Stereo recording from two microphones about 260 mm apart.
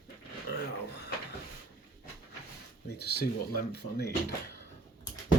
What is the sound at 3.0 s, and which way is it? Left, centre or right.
Speech, left.